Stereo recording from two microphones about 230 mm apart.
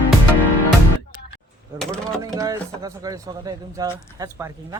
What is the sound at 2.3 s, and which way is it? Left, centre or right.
Speech, centre.